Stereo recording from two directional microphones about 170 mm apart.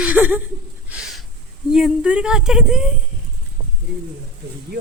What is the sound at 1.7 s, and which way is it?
Speech, 5° right (ahead or behind).